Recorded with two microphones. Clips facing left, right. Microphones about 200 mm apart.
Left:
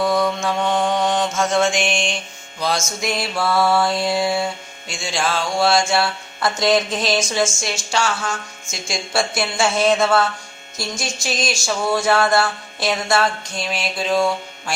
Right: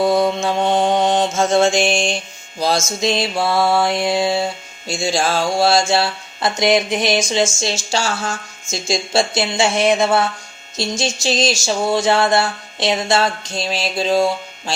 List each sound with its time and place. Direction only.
0.0 s mantra: 25° right (ahead or behind)
2.6 s speech: 30° right (ahead or behind)
4.9 s a sound: 35° right (ahead or behind)
6.4 s speech: 15° right (ahead or behind)